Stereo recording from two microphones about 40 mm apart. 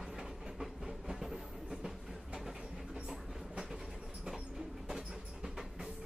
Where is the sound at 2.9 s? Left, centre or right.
Centre.